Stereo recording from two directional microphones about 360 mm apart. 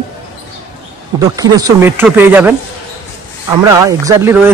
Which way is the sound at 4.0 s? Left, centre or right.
Centre.